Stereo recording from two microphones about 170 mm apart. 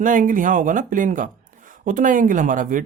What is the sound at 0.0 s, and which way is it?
Speech, 50° right (ahead or behind).